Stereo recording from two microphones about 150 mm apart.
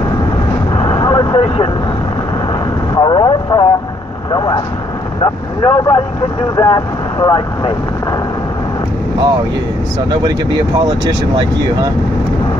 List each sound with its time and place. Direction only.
0.7 s vehicle: 30° left (ahead or behind)
2.9 s vehicle: 30° left (ahead or behind)
6.5 s speech: 25° left (ahead or behind)
10.2 s speech: 25° right (ahead or behind)